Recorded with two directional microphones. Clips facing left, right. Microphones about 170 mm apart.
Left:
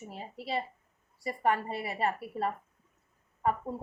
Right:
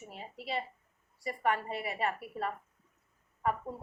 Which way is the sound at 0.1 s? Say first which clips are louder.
Left 3 dB; 35° left (ahead or behind).